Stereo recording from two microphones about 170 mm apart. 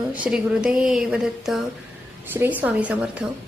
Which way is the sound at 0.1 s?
5° right (ahead or behind).